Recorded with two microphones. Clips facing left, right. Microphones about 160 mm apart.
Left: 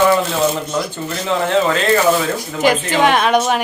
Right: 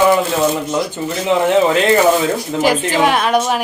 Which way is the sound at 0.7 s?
15° right (ahead or behind).